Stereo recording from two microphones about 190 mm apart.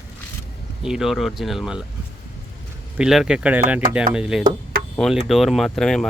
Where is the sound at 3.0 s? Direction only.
5° right (ahead or behind).